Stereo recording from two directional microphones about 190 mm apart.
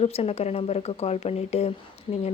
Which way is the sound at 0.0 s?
30° left (ahead or behind).